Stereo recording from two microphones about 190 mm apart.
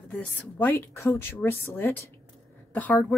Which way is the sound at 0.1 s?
10° left (ahead or behind).